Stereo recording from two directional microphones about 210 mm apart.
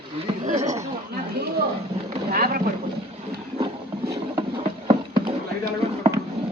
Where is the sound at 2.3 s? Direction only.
45° right (ahead or behind).